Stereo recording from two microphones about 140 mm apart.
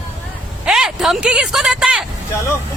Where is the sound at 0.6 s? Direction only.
5° right (ahead or behind).